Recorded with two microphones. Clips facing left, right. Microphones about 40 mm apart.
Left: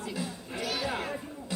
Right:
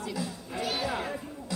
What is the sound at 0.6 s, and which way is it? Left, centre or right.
Music, right.